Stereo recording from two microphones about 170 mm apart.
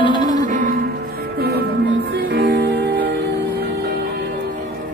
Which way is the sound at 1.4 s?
65° right (ahead or behind).